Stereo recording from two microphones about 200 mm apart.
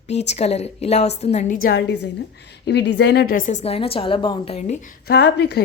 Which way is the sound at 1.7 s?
55° left (ahead or behind).